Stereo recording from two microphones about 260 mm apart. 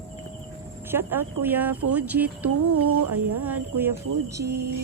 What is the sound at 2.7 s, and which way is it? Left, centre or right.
Speech, right.